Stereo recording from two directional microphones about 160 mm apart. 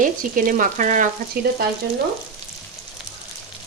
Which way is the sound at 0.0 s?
60° right (ahead or behind).